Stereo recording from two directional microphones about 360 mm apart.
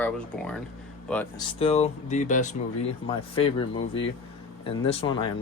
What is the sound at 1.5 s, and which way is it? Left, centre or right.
Speech, centre.